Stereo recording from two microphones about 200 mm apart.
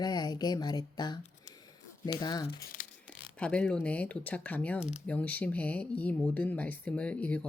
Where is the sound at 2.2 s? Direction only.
20° left (ahead or behind).